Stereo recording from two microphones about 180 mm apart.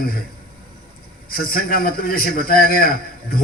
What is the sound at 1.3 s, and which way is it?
A man's voice, 55° left (ahead or behind).